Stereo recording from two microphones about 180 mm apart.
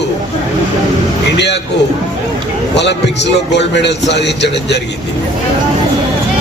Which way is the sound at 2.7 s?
75° left (ahead or behind).